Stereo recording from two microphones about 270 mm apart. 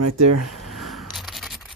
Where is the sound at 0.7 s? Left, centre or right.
Centre.